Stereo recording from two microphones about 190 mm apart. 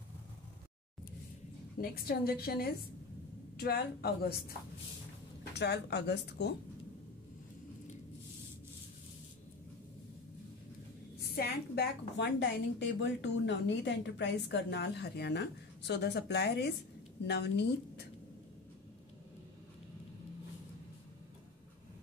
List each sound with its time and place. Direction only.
1.8 s a woman's voice: 50° left (ahead or behind)
11.1 s a woman's voice: 55° left (ahead or behind)